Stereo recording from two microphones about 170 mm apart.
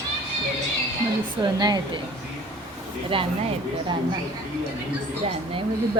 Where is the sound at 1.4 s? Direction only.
25° right (ahead or behind).